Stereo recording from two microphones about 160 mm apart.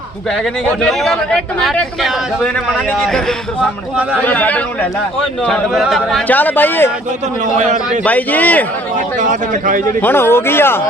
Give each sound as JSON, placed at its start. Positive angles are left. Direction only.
{"t": 0.8, "sound": "a man's voice", "side_deg": 0}
{"t": 4.3, "sound": "speech", "side_deg": 10}
{"t": 7.5, "sound": "a man's voice", "side_deg": -50}
{"t": 8.0, "sound": "speech", "side_deg": 10}
{"t": 9.0, "sound": "a man's voice", "side_deg": -50}
{"t": 10.0, "sound": "speech", "side_deg": 15}